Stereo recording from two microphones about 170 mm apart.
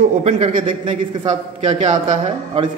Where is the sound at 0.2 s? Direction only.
35° right (ahead or behind).